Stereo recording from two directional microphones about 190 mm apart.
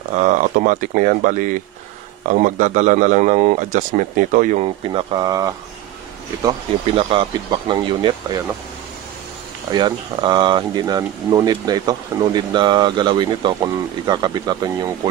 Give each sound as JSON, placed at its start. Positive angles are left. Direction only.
{"t": 0.1, "sound": "a man's voice", "side_deg": -40}
{"t": 4.6, "sound": "speech", "side_deg": -25}
{"t": 7.0, "sound": "speech", "side_deg": -25}
{"t": 9.7, "sound": "speech", "side_deg": -25}